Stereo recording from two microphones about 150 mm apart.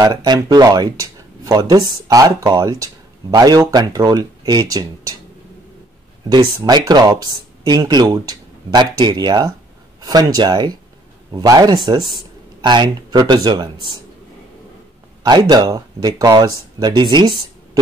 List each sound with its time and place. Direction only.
0.0 s speech: 25° right (ahead or behind)
6.2 s speech: 30° right (ahead or behind)
15.2 s speech: 30° right (ahead or behind)